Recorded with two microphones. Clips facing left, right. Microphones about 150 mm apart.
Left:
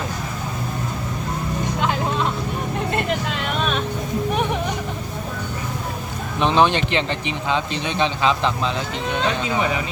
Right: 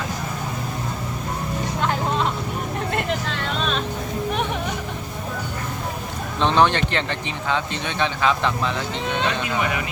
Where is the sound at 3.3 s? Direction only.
10° left (ahead or behind).